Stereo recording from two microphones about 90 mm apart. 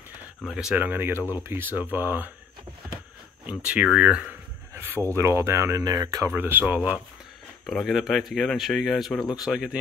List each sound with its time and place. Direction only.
0.4 s speech: 5° right (ahead or behind)
0.7 s speech: 20° right (ahead or behind)
3.4 s speech: 15° right (ahead or behind)
5.1 s speech: 30° right (ahead or behind)
6.3 s speech: 25° right (ahead or behind)
7.6 s speech: centre (ahead or behind)